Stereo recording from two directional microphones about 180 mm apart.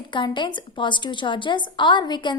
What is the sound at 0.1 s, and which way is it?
A woman's voice, 25° left (ahead or behind).